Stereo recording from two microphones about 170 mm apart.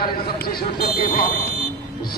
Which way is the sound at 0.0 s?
65° left (ahead or behind).